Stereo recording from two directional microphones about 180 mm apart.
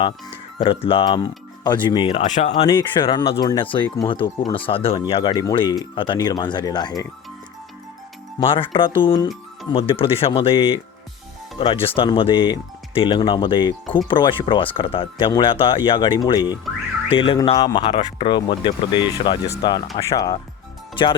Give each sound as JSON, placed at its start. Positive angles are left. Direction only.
{"t": 0.6, "sound": "speech", "side_deg": 30}
{"t": 2.2, "sound": "speech", "side_deg": 40}
{"t": 2.5, "sound": "speech", "side_deg": 25}
{"t": 8.4, "sound": "speech", "side_deg": 30}